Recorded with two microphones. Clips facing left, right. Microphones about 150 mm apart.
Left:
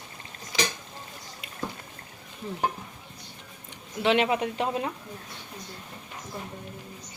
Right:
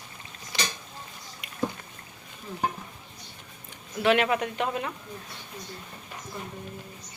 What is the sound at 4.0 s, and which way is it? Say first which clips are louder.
Speech: even; 25° left (ahead or behind).